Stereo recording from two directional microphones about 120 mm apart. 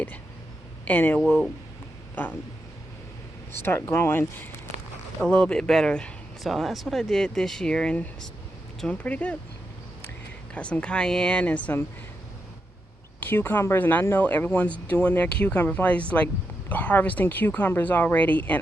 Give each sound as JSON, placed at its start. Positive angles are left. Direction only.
{"t": 0.9, "sound": "speech", "side_deg": 15}
{"t": 3.5, "sound": "speech", "side_deg": 20}
{"t": 5.2, "sound": "speech", "side_deg": 10}
{"t": 10.5, "sound": "speech", "side_deg": 10}
{"t": 13.1, "sound": "speech", "side_deg": 15}